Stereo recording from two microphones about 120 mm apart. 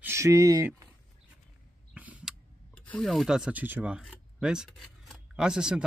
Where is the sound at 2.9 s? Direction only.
5° left (ahead or behind).